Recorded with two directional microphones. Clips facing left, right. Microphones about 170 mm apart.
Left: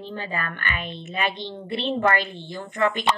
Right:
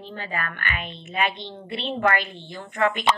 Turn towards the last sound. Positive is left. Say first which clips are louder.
# even
turn(degrees=35)  # may be behind; listen again after turning